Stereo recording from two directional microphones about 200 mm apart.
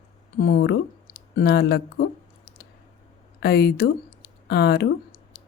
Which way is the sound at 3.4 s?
55° left (ahead or behind).